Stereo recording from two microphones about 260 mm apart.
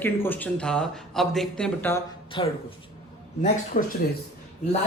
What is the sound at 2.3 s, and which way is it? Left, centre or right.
Speech, centre.